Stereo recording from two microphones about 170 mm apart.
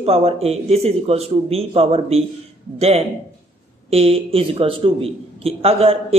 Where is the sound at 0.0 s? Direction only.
35° right (ahead or behind).